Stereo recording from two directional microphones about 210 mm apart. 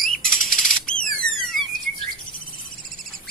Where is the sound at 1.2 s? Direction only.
70° left (ahead or behind).